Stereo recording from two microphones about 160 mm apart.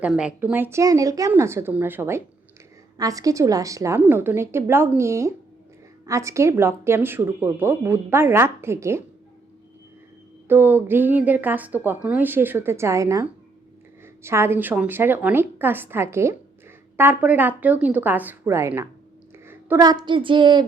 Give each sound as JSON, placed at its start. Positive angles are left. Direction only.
{"t": 0.0, "sound": "a woman's voice", "side_deg": -5}
{"t": 10.5, "sound": "a woman's voice", "side_deg": -10}